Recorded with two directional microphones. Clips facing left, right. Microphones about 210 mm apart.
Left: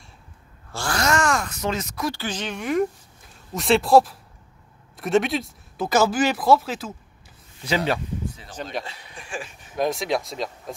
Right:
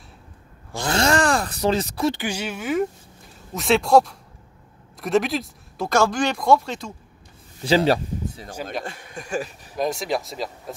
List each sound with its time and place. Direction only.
0.7 s speech: 20° right (ahead or behind)
2.1 s speech: 10° right (ahead or behind)
7.6 s speech: 35° right (ahead or behind)
8.8 s speech: 50° right (ahead or behind)
9.8 s speech: centre (ahead or behind)